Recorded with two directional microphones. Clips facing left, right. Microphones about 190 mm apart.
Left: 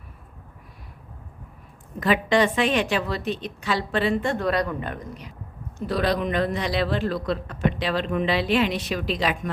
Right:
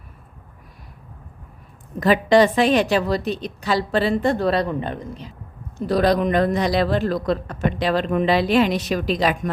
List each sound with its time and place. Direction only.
2.0 s a woman's voice: 40° right (ahead or behind)
5.7 s a man's voice: 40° right (ahead or behind)